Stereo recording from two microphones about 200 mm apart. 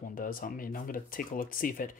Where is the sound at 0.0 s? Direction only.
45° left (ahead or behind).